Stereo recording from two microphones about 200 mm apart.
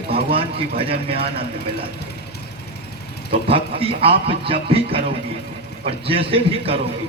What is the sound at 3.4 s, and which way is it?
A man's voice, 30° right (ahead or behind).